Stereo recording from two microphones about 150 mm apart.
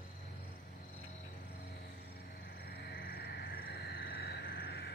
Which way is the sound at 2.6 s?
90° left.